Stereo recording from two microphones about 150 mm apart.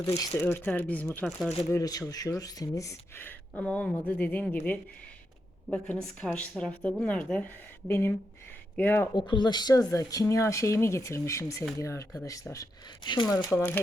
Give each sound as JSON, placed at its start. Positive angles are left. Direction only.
{"t": 0.3, "sound": "speech", "side_deg": 15}
{"t": 1.7, "sound": "speech", "side_deg": 25}
{"t": 9.1, "sound": "speech", "side_deg": 30}